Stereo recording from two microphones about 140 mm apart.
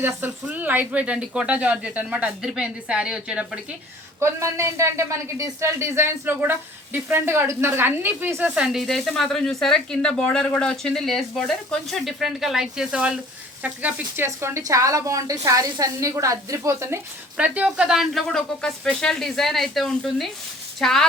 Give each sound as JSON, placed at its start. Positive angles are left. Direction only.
{"t": 0.0, "sound": "speech", "side_deg": -15}
{"t": 4.2, "sound": "speech", "side_deg": -20}
{"t": 14.3, "sound": "a woman's voice", "side_deg": -20}
{"t": 17.3, "sound": "speech", "side_deg": -10}